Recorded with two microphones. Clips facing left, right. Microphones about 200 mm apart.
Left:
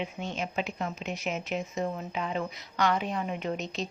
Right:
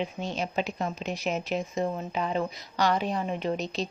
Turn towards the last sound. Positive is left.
turn(degrees=-35)  # may be behind; listen again after turning